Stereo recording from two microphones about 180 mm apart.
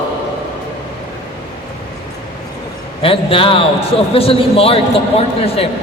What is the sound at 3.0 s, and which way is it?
A man's voice, 30° left (ahead or behind).